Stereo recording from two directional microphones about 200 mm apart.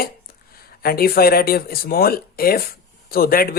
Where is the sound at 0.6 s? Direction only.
50° left (ahead or behind).